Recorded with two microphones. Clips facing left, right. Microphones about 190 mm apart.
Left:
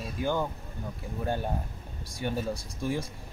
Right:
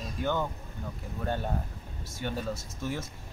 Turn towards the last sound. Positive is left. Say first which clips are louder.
# left 3 dB
turn(degrees=10)  # may be behind; listen again after turning